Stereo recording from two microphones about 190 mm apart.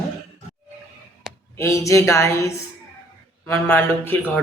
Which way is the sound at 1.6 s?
15° left (ahead or behind).